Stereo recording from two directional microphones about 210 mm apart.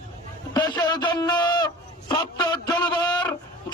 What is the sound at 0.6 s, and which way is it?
A man's voice, 20° left (ahead or behind).